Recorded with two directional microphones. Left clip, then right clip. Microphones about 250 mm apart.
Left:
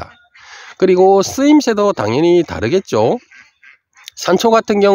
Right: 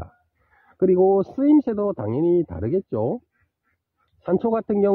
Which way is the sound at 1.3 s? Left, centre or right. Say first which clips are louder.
Left 7 dB; centre.